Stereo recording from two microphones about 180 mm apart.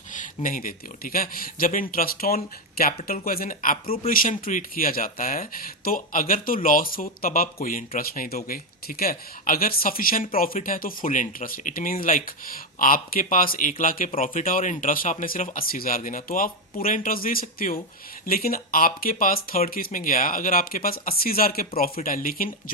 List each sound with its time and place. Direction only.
0.1 s speech: 45° left (ahead or behind)